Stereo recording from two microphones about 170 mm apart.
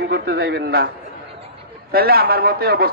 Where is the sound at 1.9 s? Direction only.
65° right (ahead or behind).